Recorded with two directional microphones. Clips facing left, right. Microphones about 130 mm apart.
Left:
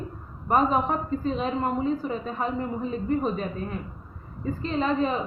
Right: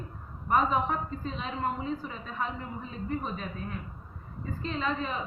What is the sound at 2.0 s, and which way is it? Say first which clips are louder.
Speech: left 7 dB; 40° left (ahead or behind).